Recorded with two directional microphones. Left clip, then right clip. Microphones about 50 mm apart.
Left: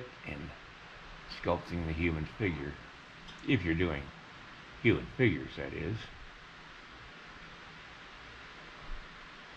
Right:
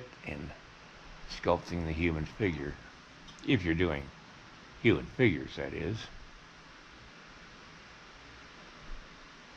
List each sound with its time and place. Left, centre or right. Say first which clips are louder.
0.3 s a sound: right 3 dB; right
1.7 s speech: right 1 dB; right
3.4 s speech: right 2 dB; right